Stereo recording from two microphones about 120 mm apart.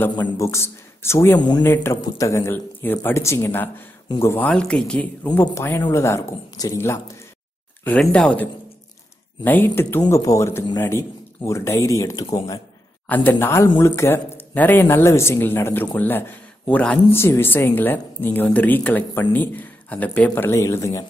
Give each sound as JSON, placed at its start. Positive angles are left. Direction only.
{"t": 0.4, "sound": "a man's voice", "side_deg": 25}
{"t": 4.5, "sound": "speech", "side_deg": 5}
{"t": 5.5, "sound": "a man's voice", "side_deg": 20}
{"t": 8.0, "sound": "a man's voice", "side_deg": 5}
{"t": 13.0, "sound": "speech", "side_deg": 15}
{"t": 17.1, "sound": "speech", "side_deg": 20}
{"t": 20.3, "sound": "a man's voice", "side_deg": 25}